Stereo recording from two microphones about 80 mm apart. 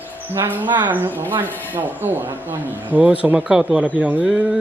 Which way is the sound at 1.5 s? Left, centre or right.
Left.